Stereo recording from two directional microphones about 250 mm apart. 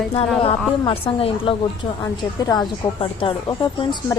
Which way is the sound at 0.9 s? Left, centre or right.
Left.